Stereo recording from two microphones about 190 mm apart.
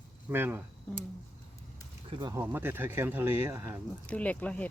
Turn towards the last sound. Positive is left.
turn(degrees=10)  # may be behind; listen again after turning